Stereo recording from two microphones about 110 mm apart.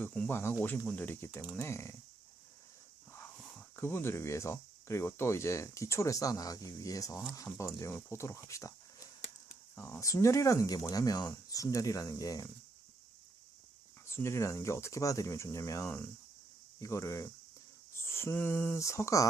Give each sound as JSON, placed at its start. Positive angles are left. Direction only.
{"t": 0.0, "sound": "speech", "side_deg": 15}
{"t": 3.8, "sound": "speech", "side_deg": 20}
{"t": 14.1, "sound": "speech", "side_deg": 25}